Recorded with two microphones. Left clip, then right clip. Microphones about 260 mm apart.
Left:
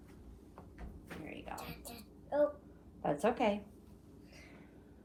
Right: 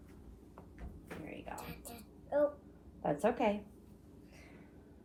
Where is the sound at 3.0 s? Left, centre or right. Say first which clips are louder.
Even; left.